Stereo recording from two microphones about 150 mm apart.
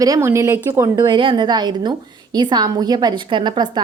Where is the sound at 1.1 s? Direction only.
35° right (ahead or behind).